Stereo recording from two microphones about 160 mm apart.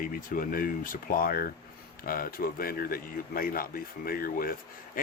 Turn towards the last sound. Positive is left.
turn(degrees=65)  # may be behind; listen again after turning